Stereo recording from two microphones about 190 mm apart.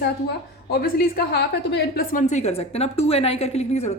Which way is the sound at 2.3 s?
35° left (ahead or behind).